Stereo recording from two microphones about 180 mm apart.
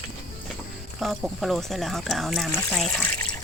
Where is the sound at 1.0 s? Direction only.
Centre (ahead or behind).